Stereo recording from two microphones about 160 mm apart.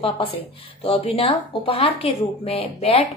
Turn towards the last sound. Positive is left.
turn(degrees=35)  # may be behind; listen again after turning